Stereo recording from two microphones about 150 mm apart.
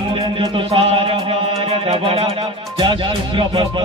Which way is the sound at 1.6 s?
40° right (ahead or behind).